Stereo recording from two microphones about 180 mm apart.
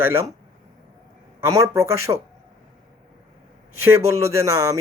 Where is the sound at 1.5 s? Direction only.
20° right (ahead or behind).